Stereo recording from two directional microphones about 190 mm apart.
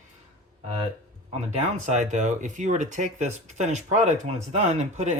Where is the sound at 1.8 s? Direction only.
40° right (ahead or behind).